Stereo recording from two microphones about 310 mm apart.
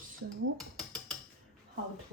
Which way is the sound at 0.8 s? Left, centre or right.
Centre.